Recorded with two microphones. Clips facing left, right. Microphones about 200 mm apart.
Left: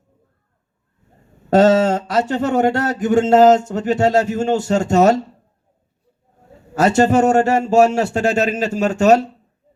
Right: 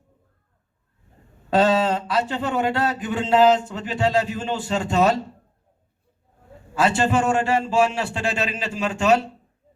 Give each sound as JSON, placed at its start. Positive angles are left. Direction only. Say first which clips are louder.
{"t": 1.5, "sound": "speech", "louder": "left 6 dB", "side_deg": 45}
{"t": 6.7, "sound": "speech", "louder": "left 6 dB", "side_deg": 40}